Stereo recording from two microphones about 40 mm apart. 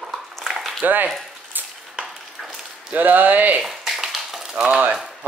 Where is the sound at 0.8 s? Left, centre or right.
Right.